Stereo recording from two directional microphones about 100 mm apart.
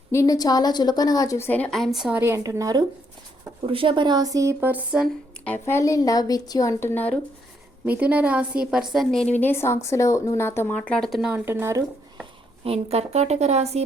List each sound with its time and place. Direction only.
0.1 s a woman's voice: 25° left (ahead or behind)
0.3 s a woman's voice: 40° left (ahead or behind)
1.4 s speech: 15° left (ahead or behind)
1.7 s a woman's voice: centre (ahead or behind)
2.1 s a woman's voice: 25° right (ahead or behind)
3.6 s speech: 65° right (ahead or behind); by 4.5 s 35° right (ahead or behind)
4.6 s a woman's voice: 15° right (ahead or behind)
5.6 s a woman's voice: 30° left (ahead or behind)
7.9 s a woman's voice: 15° right (ahead or behind)
9.2 s a woman's voice: 20° left (ahead or behind)
10.8 s speech: 10° left (ahead or behind)
11.4 s speech: 25° right (ahead or behind)
12.6 s a woman's voice: 90° right